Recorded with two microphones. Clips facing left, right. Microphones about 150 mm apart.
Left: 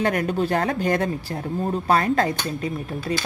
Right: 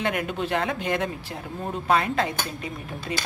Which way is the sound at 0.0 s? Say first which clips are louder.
Left 5 dB; 40° left (ahead or behind).